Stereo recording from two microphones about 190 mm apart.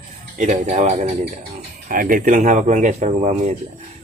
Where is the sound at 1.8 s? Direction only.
45° right (ahead or behind).